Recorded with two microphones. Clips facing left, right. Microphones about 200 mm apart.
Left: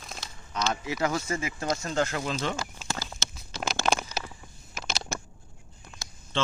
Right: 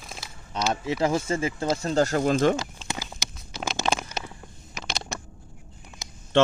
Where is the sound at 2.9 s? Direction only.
15° right (ahead or behind).